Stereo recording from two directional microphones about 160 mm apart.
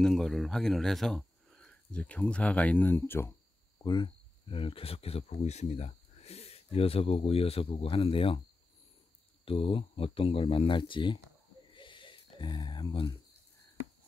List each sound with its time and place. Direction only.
0.0 s speech: centre (ahead or behind); by 8.4 s 35° left (ahead or behind)
9.4 s speech: 35° left (ahead or behind)
11.7 s a sound: 30° left (ahead or behind)